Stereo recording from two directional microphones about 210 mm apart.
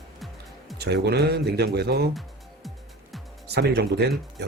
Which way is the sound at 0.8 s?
50° right (ahead or behind).